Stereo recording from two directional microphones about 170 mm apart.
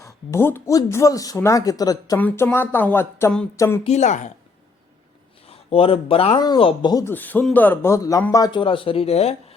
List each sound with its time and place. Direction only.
0.0 s speech: 15° left (ahead or behind)
3.8 s speech: 40° left (ahead or behind)
5.5 s speech: 35° left (ahead or behind)
7.1 s speech: 10° left (ahead or behind); by 9.6 s 35° left (ahead or behind)